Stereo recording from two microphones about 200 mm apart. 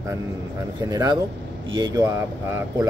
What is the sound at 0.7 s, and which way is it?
Speech, 20° right (ahead or behind).